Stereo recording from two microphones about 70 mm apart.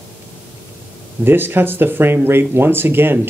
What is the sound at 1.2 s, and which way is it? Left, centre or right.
Speech, right.